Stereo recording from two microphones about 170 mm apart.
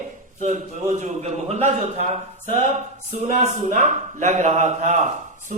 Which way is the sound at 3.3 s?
45° right (ahead or behind).